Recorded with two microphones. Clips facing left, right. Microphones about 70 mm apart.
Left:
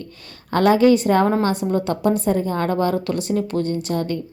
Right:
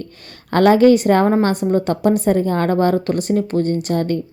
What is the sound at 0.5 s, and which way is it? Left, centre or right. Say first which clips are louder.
A woman's voice: right 3 dB; right.